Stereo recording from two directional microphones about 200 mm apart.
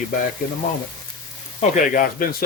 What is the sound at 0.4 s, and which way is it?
Speech, 45° left (ahead or behind).